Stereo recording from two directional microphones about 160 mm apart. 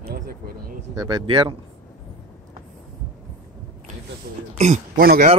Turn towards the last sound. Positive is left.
turn(degrees=-75)  # may be behind; listen again after turning